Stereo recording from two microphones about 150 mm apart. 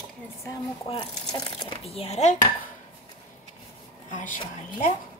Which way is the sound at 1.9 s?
45° left (ahead or behind).